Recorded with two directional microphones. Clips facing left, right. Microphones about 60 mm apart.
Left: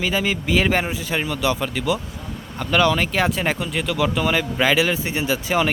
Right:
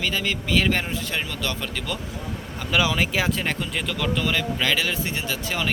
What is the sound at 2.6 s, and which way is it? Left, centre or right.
Speech, centre.